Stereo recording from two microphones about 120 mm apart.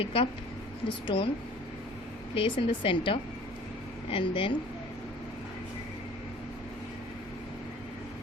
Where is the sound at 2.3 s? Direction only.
50° left (ahead or behind).